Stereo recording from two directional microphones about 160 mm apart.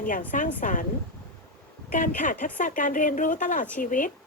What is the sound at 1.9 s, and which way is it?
Speech, 55° left (ahead or behind).